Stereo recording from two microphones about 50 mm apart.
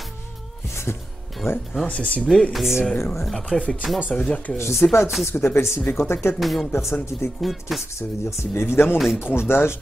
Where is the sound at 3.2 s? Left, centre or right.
Centre.